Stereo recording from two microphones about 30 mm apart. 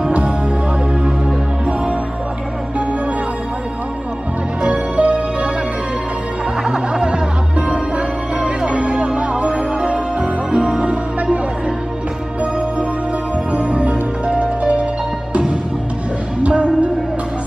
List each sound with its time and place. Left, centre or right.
1.0 s music: right
4.6 s music: right
6.7 s music: right
7.5 s music: right
13.5 s music: right
16.4 s music: right